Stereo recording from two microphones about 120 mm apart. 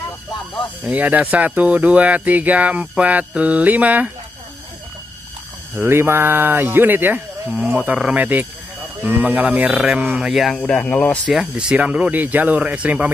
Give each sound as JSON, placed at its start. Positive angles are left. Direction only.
{"t": 0.8, "sound": "speech", "side_deg": -15}
{"t": 5.8, "sound": "speech", "side_deg": -20}
{"t": 10.1, "sound": "speech", "side_deg": 0}
{"t": 10.6, "sound": "speech", "side_deg": 10}
{"t": 11.2, "sound": "speech", "side_deg": -5}